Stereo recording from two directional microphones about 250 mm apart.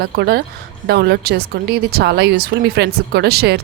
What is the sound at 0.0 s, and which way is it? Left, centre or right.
Speech, right.